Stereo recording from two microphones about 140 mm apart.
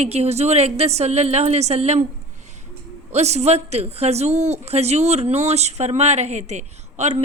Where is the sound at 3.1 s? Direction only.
50° right (ahead or behind).